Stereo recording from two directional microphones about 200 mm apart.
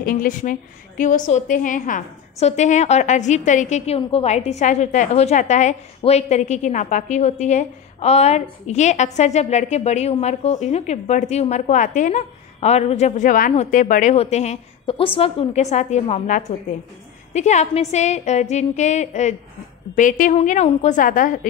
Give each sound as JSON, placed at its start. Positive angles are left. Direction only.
{"t": 0.0, "sound": "a woman's voice", "side_deg": 45}